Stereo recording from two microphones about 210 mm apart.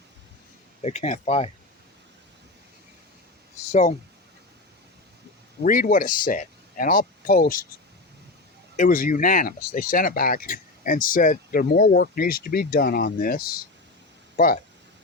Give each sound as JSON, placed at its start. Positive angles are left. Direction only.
{"t": 0.8, "sound": "speech", "side_deg": 30}
{"t": 3.7, "sound": "speech", "side_deg": 35}
{"t": 5.6, "sound": "speech", "side_deg": 40}
{"t": 8.7, "sound": "speech", "side_deg": 40}